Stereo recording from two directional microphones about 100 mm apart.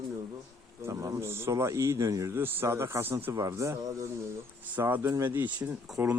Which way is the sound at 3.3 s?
30° right (ahead or behind).